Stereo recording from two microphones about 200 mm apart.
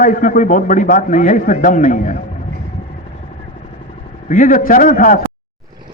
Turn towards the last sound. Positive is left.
turn(degrees=40)  # may be behind; listen again after turning